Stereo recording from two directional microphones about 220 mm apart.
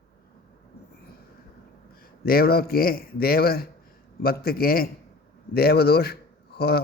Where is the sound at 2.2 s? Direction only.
45° left (ahead or behind).